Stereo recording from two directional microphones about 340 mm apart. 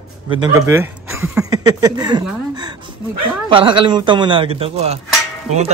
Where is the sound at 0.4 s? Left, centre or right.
Centre.